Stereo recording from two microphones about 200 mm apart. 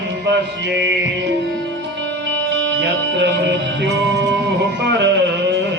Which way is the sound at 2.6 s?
65° right (ahead or behind).